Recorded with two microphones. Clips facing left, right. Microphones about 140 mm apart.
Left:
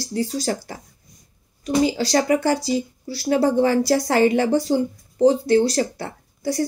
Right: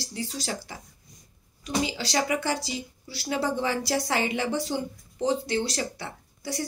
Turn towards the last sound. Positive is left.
turn(degrees=45)  # may be behind; listen again after turning